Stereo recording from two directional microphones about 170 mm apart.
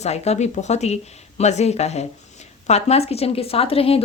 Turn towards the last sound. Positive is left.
turn(degrees=35)  # may be behind; listen again after turning